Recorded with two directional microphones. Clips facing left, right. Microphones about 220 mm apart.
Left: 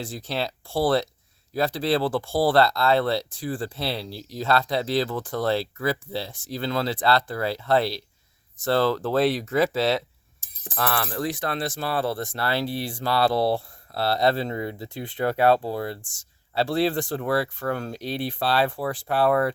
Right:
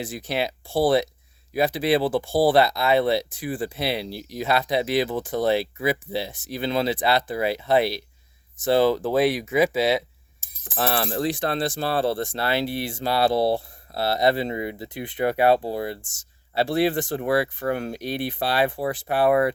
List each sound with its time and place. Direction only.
0.0 s speech: 20° right (ahead or behind)
10.4 s music: 30° left (ahead or behind)
10.8 s speech: 25° right (ahead or behind)